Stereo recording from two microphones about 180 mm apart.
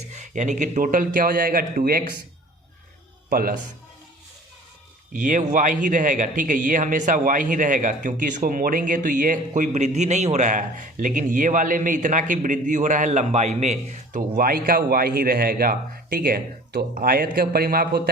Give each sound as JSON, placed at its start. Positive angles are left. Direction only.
{"t": 0.1, "sound": "a man's voice", "side_deg": -40}
{"t": 3.2, "sound": "speech", "side_deg": -50}
{"t": 5.1, "sound": "a man's voice", "side_deg": -45}